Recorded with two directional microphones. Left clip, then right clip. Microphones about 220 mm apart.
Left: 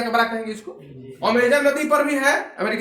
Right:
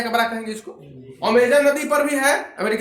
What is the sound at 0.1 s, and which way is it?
Speech, 25° right (ahead or behind).